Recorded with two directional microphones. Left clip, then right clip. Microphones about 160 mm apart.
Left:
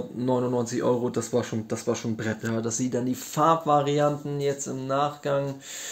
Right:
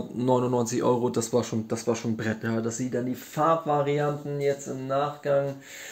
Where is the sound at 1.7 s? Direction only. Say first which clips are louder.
Even; centre (ahead or behind).